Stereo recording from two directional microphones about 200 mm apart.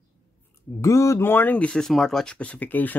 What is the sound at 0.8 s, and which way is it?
Speech, 15° left (ahead or behind).